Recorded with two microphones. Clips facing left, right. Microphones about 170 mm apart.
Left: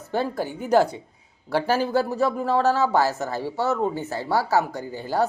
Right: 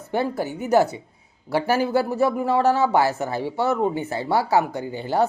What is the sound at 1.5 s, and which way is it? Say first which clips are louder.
Speech: right 1 dB; 10° right (ahead or behind).